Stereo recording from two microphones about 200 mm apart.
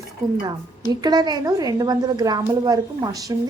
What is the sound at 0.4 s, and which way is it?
A woman's voice, 20° right (ahead or behind).